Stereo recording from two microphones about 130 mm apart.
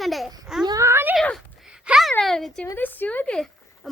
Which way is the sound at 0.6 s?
25° right (ahead or behind).